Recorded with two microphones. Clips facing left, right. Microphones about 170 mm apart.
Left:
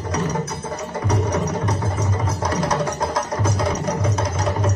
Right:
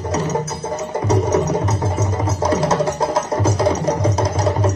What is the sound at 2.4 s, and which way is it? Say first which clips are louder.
Music: right 5 dB; 25° right (ahead or behind).